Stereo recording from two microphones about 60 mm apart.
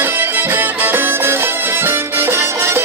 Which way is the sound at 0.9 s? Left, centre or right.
Right.